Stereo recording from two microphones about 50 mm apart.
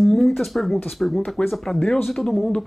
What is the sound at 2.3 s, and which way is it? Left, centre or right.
Speech, centre.